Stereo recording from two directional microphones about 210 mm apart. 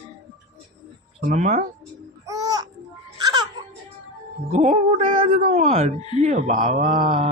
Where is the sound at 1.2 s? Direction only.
35° right (ahead or behind).